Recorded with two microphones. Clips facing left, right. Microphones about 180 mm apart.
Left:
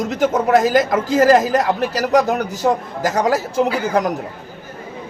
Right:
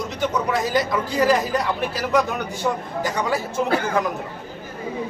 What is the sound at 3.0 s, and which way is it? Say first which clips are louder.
Speech: left 8 dB; 90° left.